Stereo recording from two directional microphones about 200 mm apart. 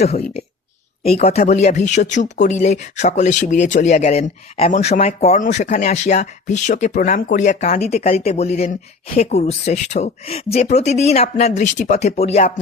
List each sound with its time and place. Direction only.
0.0 s speech: 30° left (ahead or behind)